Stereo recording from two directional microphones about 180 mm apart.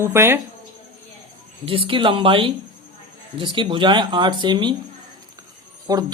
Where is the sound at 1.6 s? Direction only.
30° right (ahead or behind).